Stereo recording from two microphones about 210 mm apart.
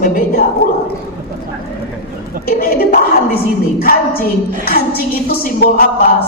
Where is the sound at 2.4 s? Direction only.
45° left (ahead or behind).